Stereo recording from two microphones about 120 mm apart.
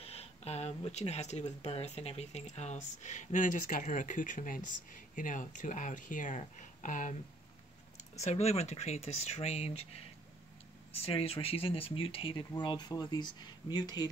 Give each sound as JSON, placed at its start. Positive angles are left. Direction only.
{"t": 0.0, "sound": "speech", "side_deg": 60}
{"t": 8.2, "sound": "speech", "side_deg": 65}
{"t": 11.0, "sound": "speech", "side_deg": 55}